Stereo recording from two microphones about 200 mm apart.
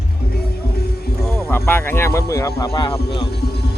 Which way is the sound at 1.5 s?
10° left (ahead or behind).